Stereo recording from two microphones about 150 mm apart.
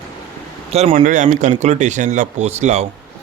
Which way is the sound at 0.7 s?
45° right (ahead or behind).